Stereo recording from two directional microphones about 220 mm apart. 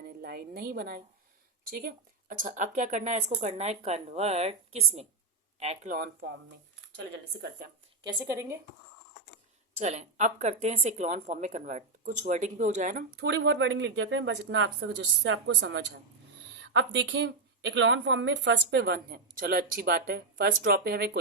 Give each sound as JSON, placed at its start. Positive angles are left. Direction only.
{"t": 0.2, "sound": "a woman's voice", "side_deg": -45}
{"t": 8.0, "sound": "a woman's voice", "side_deg": -15}
{"t": 9.7, "sound": "a woman's voice", "side_deg": -30}